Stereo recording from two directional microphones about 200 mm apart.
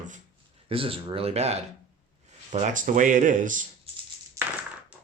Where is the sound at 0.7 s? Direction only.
25° right (ahead or behind).